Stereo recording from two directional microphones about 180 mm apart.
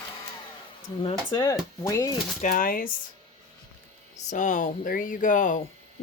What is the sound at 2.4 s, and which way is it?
Speech, 50° left (ahead or behind).